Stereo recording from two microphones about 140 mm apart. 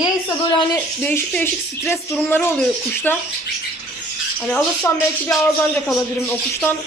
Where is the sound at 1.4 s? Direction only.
15° left (ahead or behind).